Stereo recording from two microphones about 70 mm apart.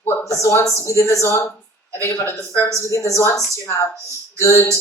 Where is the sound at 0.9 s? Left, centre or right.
Left.